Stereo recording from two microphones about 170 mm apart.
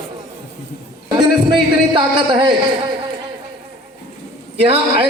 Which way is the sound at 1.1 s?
30° right (ahead or behind).